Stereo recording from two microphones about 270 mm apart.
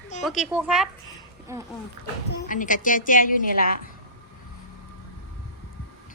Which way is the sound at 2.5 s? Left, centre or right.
Left.